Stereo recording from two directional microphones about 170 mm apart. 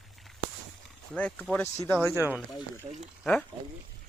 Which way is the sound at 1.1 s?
10° left (ahead or behind).